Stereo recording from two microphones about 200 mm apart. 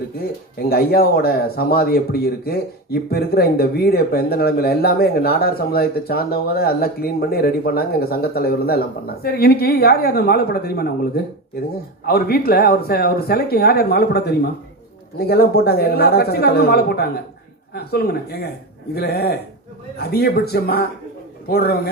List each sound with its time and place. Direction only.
0.2 s speech: 50° left (ahead or behind)